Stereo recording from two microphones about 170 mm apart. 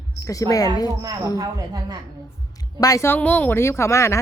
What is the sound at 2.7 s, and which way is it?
Speech, 20° left (ahead or behind).